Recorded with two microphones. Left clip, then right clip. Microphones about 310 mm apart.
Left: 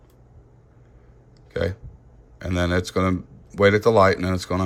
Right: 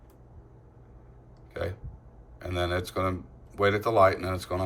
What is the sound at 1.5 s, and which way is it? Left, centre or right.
Burping, centre.